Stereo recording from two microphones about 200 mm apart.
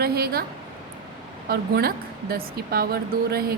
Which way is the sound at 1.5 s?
50° right (ahead or behind).